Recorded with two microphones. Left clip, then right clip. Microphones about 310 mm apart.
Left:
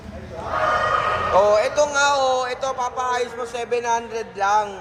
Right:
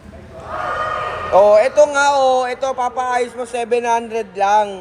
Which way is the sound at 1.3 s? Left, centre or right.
Right.